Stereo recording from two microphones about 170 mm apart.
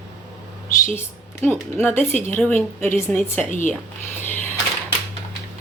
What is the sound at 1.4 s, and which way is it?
Speech, 15° left (ahead or behind).